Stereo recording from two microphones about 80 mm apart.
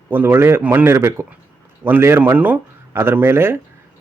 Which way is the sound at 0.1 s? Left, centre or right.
Right.